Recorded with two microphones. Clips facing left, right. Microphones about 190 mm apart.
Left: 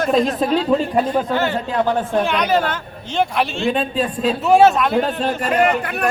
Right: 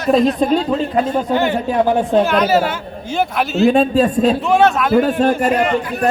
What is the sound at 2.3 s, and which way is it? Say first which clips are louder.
A man's voice: right 3 dB; 5° right (ahead or behind).